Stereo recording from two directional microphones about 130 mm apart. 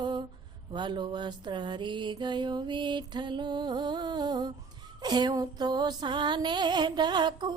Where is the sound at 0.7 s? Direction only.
35° right (ahead or behind).